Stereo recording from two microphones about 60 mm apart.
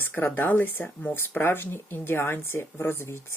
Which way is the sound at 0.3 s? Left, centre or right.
Left.